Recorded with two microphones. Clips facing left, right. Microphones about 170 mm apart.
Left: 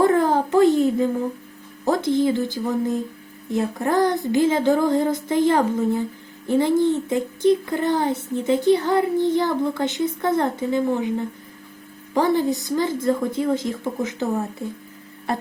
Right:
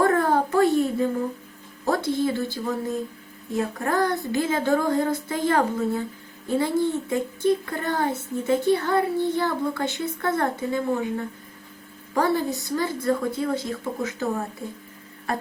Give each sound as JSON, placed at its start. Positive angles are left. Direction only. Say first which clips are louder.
{"t": 0.0, "sound": "a sound", "louder": "left 3 dB", "side_deg": 20}
{"t": 1.8, "sound": "a woman's voice", "louder": "left 4 dB", "side_deg": 20}
{"t": 12.1, "sound": "speech", "louder": "left 4 dB", "side_deg": 20}